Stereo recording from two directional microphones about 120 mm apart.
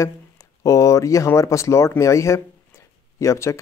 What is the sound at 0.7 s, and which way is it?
Speech, 25° left (ahead or behind).